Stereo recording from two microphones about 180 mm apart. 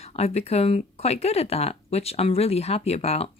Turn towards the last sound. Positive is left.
turn(degrees=35)  # may be behind; listen again after turning